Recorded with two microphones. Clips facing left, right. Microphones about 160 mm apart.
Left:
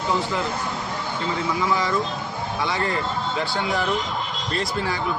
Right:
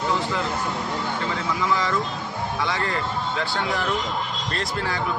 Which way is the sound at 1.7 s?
15° left (ahead or behind).